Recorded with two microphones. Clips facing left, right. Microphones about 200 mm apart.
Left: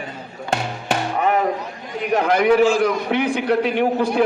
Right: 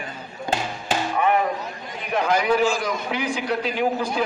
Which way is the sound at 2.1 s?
60° left (ahead or behind).